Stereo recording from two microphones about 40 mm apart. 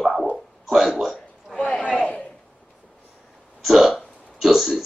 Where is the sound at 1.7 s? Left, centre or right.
Left.